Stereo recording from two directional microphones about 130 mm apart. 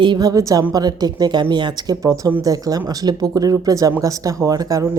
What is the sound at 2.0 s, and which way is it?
Speech, 25° right (ahead or behind).